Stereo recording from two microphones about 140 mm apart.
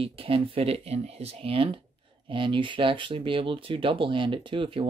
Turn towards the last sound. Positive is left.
turn(degrees=-40)  # may be behind; listen again after turning